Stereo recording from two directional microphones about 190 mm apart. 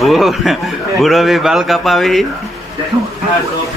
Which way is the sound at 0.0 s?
Centre (ahead or behind).